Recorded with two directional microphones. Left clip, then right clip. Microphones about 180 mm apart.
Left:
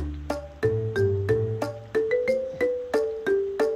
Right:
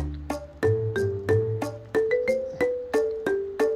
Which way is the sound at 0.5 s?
Centre (ahead or behind).